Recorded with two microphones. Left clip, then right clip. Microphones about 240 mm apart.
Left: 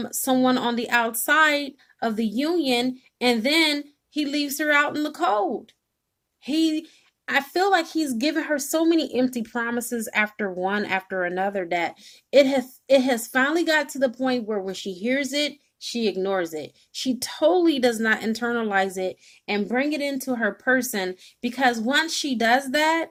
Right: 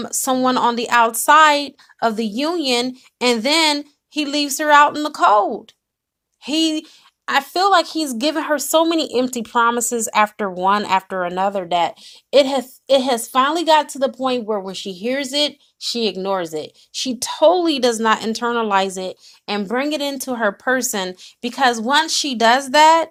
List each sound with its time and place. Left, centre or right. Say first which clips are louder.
0.0 s speech: right 4 dB; centre
8.3 s speech: right 10 dB; right
9.8 s speech: right 8 dB; centre
10.6 s speech: right 9 dB; right
11.7 s speech: right 7 dB; centre